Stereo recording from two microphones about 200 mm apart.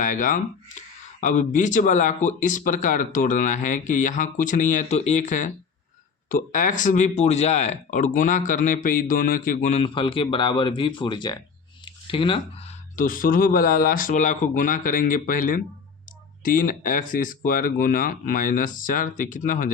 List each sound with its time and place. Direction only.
0.0 s speech: 40° left (ahead or behind)
13.0 s speech: 45° left (ahead or behind)